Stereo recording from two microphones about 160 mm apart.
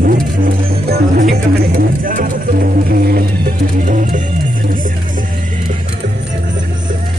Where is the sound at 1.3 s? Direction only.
65° right (ahead or behind).